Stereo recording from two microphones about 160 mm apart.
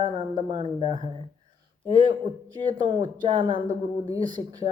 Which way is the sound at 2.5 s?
30° right (ahead or behind).